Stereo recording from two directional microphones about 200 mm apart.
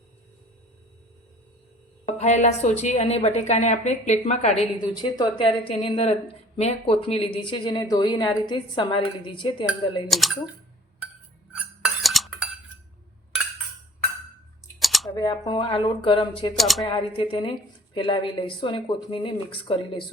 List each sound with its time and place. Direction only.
2.1 s a woman's voice: 35° left (ahead or behind)
4.8 s a woman's voice: 20° left (ahead or behind)
10.1 s speech: centre (ahead or behind)
11.5 s cutlery: 5° right (ahead or behind)
14.8 s a sound: centre (ahead or behind)
15.1 s a woman's voice: 20° left (ahead or behind)
16.6 s speech: centre (ahead or behind)
16.8 s a woman's voice: 25° left (ahead or behind)